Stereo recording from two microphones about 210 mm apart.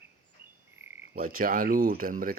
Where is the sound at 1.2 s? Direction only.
45° right (ahead or behind).